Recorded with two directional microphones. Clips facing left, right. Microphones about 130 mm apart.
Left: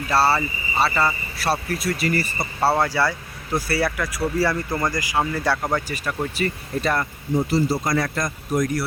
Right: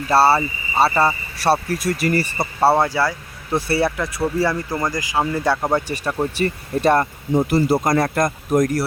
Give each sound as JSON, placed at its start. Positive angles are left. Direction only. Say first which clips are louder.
{"t": 0.1, "sound": "speech", "louder": "right 4 dB", "side_deg": -30}
{"t": 2.6, "sound": "speech", "louder": "right 3 dB", "side_deg": -20}